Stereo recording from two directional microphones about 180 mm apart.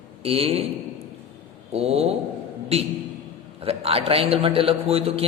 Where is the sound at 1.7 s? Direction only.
35° right (ahead or behind).